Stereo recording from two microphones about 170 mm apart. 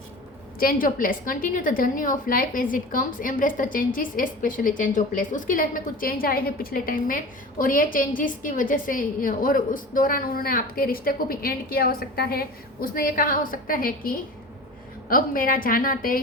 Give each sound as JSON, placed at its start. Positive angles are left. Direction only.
{"t": 0.6, "sound": "a woman's voice", "side_deg": 55}